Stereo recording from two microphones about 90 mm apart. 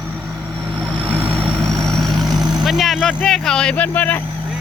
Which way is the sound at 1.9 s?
5° left (ahead or behind).